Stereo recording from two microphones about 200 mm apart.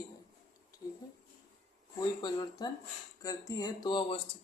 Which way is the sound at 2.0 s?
20° left (ahead or behind).